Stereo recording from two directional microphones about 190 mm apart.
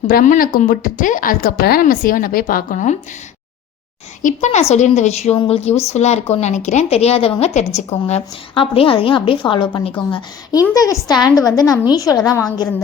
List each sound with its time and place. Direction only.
0.1 s a woman's voice: 50° left (ahead or behind)
4.2 s a woman's voice: 40° left (ahead or behind); by 12.5 s 20° left (ahead or behind)